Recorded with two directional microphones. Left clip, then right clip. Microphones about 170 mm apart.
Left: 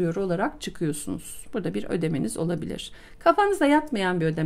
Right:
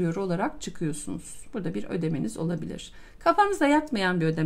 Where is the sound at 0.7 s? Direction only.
30° left (ahead or behind).